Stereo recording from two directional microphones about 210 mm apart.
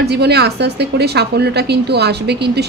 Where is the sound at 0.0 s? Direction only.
50° right (ahead or behind).